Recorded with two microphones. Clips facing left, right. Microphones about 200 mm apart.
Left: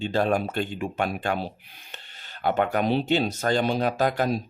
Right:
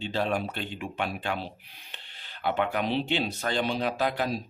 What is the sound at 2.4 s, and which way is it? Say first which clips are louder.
Speech: left 4 dB; 45° left (ahead or behind).